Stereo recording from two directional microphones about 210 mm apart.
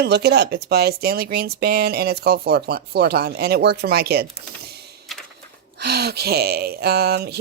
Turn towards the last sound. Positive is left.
turn(degrees=-50)  # may be behind; listen again after turning